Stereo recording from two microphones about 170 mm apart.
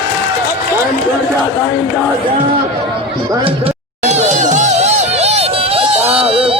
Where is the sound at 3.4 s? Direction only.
35° right (ahead or behind).